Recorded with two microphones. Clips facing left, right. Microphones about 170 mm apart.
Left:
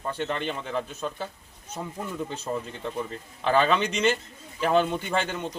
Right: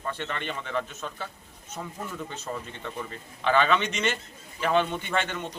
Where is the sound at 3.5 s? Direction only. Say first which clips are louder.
Left 1 dB; 35° left (ahead or behind).